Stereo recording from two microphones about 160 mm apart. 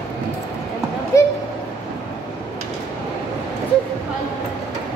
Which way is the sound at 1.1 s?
20° left (ahead or behind).